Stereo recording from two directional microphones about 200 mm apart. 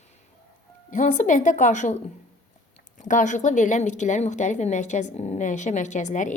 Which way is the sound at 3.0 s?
40° left (ahead or behind).